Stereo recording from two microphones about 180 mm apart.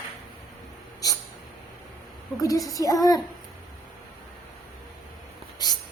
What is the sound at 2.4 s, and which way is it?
Speech, 20° left (ahead or behind).